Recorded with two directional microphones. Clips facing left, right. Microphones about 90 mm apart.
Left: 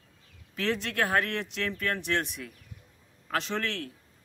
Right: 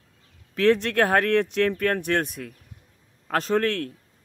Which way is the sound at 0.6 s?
50° right (ahead or behind).